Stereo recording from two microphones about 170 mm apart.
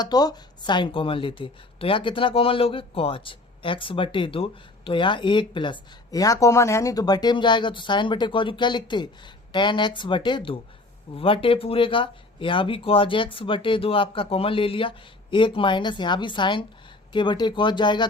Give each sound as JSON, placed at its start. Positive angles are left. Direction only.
{"t": 0.0, "sound": "speech", "side_deg": 25}